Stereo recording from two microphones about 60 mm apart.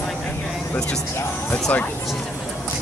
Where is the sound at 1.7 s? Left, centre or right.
Left.